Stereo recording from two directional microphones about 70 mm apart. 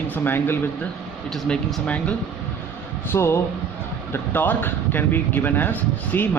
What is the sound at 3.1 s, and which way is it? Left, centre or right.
Speech, left.